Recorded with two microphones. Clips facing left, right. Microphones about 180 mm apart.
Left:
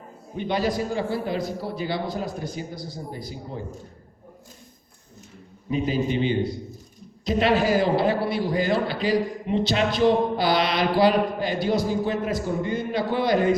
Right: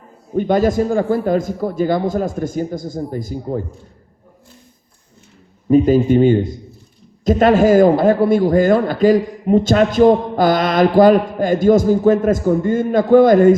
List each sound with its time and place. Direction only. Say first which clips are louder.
0.3 s a man's voice: right 10 dB; 45° right (ahead or behind)
5.6 s a man's voice: right 12 dB; 45° right (ahead or behind)